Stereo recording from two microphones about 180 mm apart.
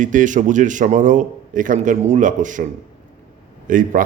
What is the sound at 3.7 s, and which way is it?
Speech, 50° right (ahead or behind).